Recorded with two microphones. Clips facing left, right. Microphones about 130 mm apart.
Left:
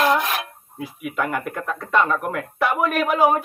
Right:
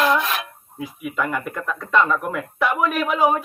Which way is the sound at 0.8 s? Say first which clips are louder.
Even; centre (ahead or behind).